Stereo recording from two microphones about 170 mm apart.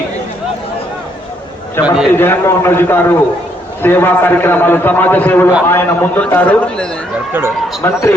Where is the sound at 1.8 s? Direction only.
5° right (ahead or behind).